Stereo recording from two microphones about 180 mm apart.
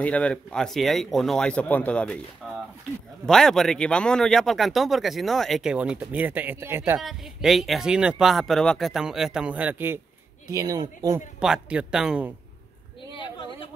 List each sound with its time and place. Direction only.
0.0 s speech: 5° left (ahead or behind)
3.3 s speech: centre (ahead or behind)
7.0 s speech: centre (ahead or behind); by 11.2 s 20° right (ahead or behind)
11.3 s speech: 5° right (ahead or behind)
13.2 s a sound: 25° left (ahead or behind)